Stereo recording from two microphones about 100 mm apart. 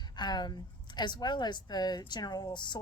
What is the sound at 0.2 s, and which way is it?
A woman's voice, 45° left (ahead or behind).